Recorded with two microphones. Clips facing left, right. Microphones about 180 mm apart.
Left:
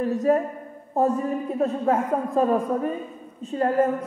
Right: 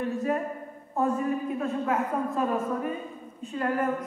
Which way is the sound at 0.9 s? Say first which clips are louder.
Left 4 dB; 35° left (ahead or behind).